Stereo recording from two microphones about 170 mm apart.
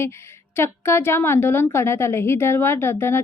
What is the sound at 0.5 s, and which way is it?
A woman's voice, 15° left (ahead or behind).